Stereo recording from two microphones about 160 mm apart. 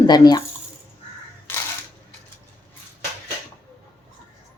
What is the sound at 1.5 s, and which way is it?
Crushing, 15° left (ahead or behind).